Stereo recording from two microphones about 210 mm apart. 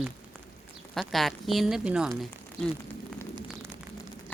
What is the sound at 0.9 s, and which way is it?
Speech, centre (ahead or behind).